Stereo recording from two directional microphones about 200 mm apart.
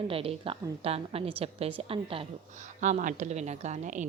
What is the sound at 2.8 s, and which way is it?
A woman's voice, 40° right (ahead or behind).